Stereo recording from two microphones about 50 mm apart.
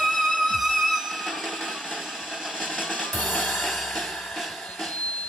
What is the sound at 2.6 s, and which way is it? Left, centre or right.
Drum, centre.